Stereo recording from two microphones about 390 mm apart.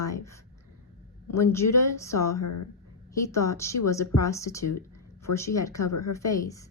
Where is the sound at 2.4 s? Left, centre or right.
Left.